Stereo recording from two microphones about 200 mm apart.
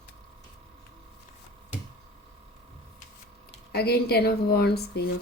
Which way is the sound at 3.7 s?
50° left (ahead or behind).